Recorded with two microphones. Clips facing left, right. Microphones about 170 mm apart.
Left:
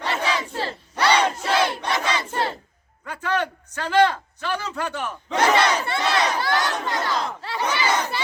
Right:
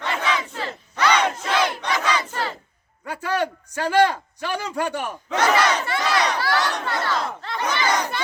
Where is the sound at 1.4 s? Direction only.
30° left (ahead or behind).